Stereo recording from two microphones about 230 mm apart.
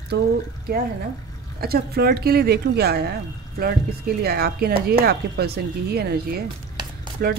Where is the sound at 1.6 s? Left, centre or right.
Right.